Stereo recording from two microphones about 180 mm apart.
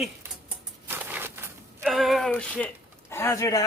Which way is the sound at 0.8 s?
10° right (ahead or behind).